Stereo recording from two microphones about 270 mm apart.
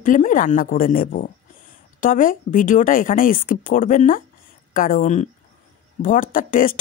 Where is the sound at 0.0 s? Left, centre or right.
Left.